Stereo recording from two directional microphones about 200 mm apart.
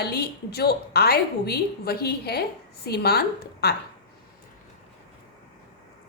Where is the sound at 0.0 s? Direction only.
50° left (ahead or behind).